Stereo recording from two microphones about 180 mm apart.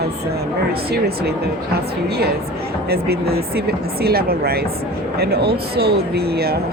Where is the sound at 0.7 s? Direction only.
60° right (ahead or behind).